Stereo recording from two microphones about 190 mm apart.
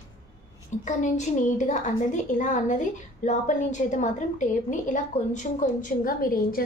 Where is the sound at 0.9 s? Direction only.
40° left (ahead or behind).